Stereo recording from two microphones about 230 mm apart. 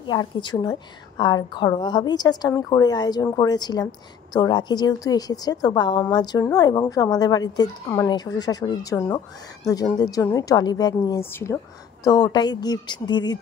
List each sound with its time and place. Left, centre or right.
0.0 s a woman's voice: centre